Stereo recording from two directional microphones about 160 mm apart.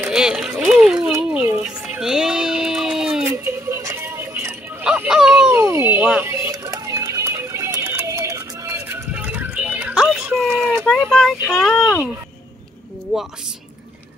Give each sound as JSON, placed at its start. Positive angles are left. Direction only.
{"t": 0.0, "sound": "speech", "side_deg": -5}
{"t": 1.3, "sound": "a sound", "side_deg": -10}
{"t": 3.4, "sound": "music", "side_deg": -15}
{"t": 4.8, "sound": "a sound", "side_deg": -5}
{"t": 5.5, "sound": "a sound", "side_deg": -15}
{"t": 6.0, "sound": "music", "side_deg": -15}
{"t": 6.6, "sound": "run", "side_deg": -25}
{"t": 9.1, "sound": "music", "side_deg": -10}
{"t": 10.9, "sound": "speech", "side_deg": 0}